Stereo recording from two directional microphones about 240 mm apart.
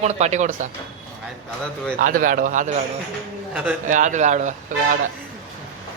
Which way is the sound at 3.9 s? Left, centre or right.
Right.